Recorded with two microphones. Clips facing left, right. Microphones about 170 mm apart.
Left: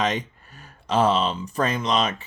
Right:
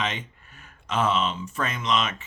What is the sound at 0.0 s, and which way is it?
Speech, 40° left (ahead or behind).